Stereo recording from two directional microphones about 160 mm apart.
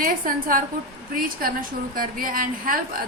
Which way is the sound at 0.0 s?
60° right (ahead or behind).